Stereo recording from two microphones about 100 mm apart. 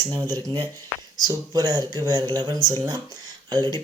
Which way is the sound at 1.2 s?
35° right (ahead or behind).